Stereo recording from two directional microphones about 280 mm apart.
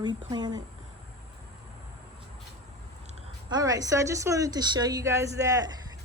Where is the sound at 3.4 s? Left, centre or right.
Centre.